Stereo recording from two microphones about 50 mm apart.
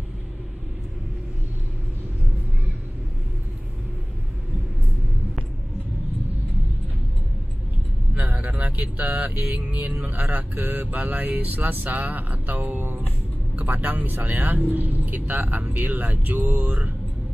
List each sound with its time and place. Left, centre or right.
8.1 s speech: right
13.6 s speech: right